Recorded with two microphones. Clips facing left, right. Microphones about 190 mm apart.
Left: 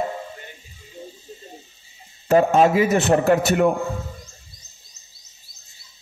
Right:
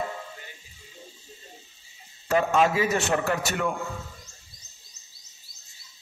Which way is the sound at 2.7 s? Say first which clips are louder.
Left 7 dB; 25° left (ahead or behind).